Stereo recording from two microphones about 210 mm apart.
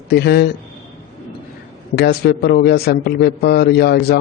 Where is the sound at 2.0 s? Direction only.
50° left (ahead or behind).